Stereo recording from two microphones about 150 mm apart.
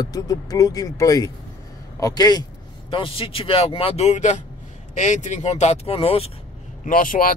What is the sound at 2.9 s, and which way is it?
Speech, 35° left (ahead or behind).